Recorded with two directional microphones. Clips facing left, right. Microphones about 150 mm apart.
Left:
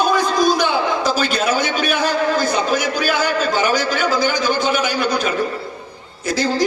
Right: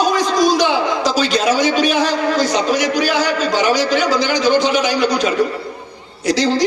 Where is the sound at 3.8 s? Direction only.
50° left (ahead or behind).